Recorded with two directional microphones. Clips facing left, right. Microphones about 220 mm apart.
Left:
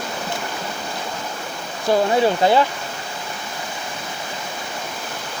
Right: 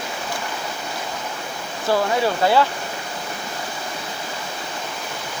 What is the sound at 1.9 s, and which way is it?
Speech, 20° left (ahead or behind).